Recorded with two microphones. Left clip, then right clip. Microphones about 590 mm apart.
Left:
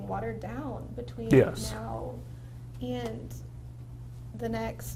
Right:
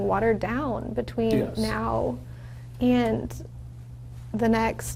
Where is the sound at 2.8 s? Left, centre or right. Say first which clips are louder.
Right 12 dB; right.